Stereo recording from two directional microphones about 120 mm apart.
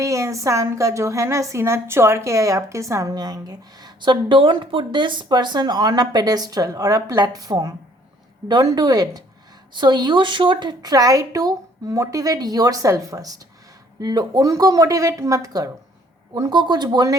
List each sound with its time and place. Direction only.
0.0 s a woman's voice: 25° right (ahead or behind)